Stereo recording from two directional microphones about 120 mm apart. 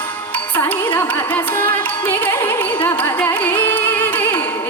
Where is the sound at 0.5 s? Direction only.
15° left (ahead or behind).